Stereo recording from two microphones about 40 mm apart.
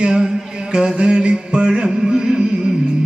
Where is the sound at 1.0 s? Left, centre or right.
Right.